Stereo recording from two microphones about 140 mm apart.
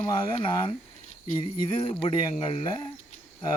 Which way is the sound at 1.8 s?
40° left (ahead or behind).